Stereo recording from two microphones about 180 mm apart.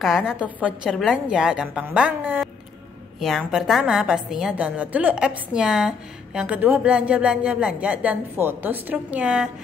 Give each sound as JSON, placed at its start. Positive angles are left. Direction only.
{"t": 0.0, "sound": "a woman's voice", "side_deg": 0}